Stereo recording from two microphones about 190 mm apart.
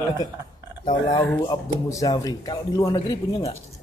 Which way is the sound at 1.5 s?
20° left (ahead or behind).